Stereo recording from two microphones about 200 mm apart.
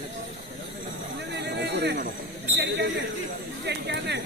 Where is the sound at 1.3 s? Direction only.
60° right (ahead or behind).